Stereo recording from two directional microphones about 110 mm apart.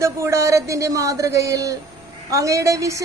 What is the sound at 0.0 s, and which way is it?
A woman's voice, 25° right (ahead or behind).